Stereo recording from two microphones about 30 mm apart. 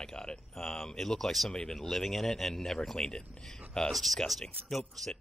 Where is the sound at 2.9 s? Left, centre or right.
Left.